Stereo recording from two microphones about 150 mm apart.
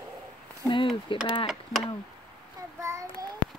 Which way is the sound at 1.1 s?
35° left (ahead or behind).